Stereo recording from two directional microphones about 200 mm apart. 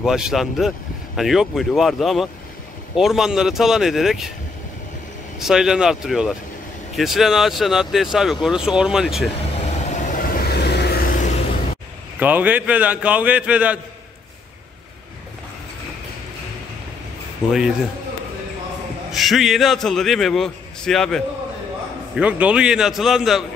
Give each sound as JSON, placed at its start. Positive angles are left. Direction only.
{"t": 0.0, "sound": "speech", "side_deg": 0}
{"t": 5.4, "sound": "speech", "side_deg": 0}
{"t": 9.9, "sound": "vehicle", "side_deg": 40}
{"t": 10.5, "sound": "vehicle", "side_deg": 55}
{"t": 12.2, "sound": "a man's voice", "side_deg": -10}
{"t": 17.5, "sound": "speech", "side_deg": -5}
{"t": 19.1, "sound": "speech", "side_deg": 0}